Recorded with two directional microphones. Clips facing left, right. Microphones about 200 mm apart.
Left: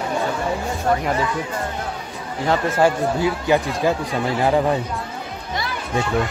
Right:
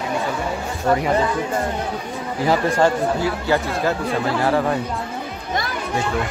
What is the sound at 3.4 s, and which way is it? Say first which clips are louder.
Speech: left 2 dB; 15° left (ahead or behind).